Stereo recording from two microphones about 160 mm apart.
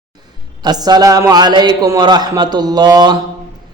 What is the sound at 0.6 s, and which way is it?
A man's voice, 25° right (ahead or behind).